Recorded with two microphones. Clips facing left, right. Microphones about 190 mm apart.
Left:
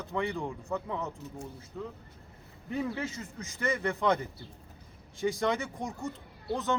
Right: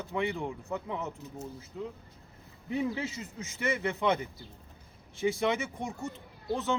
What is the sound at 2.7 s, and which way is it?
Speech, 15° right (ahead or behind).